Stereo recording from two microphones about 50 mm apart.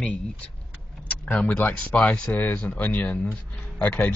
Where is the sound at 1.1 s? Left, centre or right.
Left.